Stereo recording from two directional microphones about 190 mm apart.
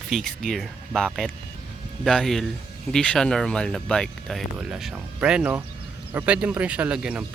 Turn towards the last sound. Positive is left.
turn(degrees=-5)  # may be behind; listen again after turning